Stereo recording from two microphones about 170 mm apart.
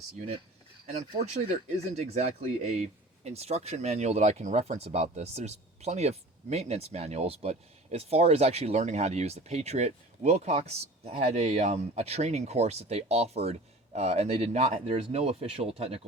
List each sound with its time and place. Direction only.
0.9 s speech: 40° right (ahead or behind)